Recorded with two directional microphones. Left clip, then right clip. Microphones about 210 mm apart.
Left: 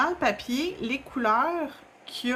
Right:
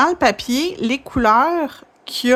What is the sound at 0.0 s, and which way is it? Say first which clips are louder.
Speech: right 10 dB; 50° right (ahead or behind).